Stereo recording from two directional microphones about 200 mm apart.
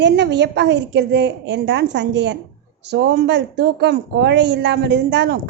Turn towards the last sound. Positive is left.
turn(degrees=-60)  # may be behind; listen again after turning